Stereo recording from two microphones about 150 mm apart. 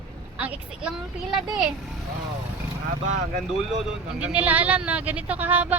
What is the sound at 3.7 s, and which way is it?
Speech, 5° right (ahead or behind).